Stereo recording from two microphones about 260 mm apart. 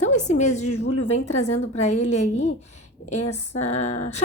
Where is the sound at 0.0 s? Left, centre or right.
Left.